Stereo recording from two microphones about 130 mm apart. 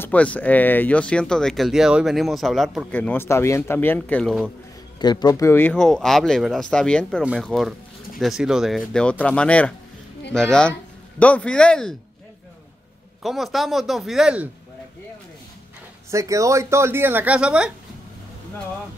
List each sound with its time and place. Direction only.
0.0 s speech: 10° left (ahead or behind)
2.9 s speech: 15° left (ahead or behind)
4.9 s speech: 30° left (ahead or behind); by 9.0 s centre (ahead or behind)
9.2 s speech: 10° left (ahead or behind)
13.2 s speech: centre (ahead or behind)
16.1 s speech: 25° right (ahead or behind); by 17.6 s 10° right (ahead or behind)